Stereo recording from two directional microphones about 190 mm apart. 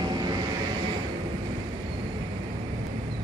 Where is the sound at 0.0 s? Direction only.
20° right (ahead or behind).